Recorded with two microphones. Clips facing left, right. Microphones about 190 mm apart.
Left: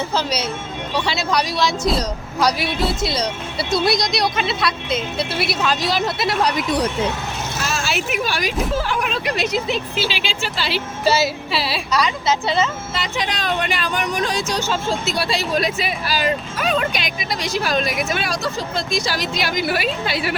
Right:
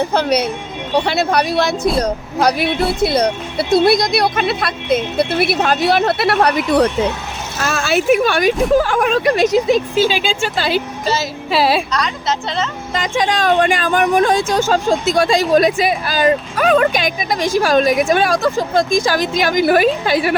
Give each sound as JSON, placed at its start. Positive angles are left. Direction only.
{"t": 0.0, "sound": "speech", "side_deg": -60}
{"t": 11.0, "sound": "music", "side_deg": 10}
{"t": 11.5, "sound": "speech", "side_deg": -50}
{"t": 11.9, "sound": "a woman's voice", "side_deg": 5}
{"t": 12.9, "sound": "speech", "side_deg": -45}